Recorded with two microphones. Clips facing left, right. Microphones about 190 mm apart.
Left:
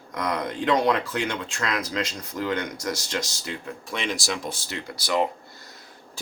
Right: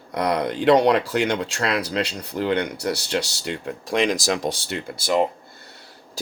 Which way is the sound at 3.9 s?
40° right (ahead or behind).